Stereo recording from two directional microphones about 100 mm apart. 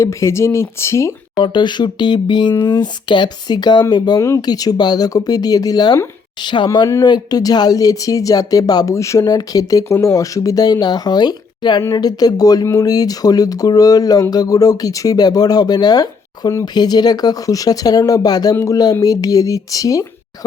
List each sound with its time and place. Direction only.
0.0 s speech: 30° left (ahead or behind)
1.4 s speech: 50° left (ahead or behind)